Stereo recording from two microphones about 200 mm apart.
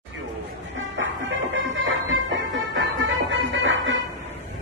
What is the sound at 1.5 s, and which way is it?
Music, 75° right (ahead or behind).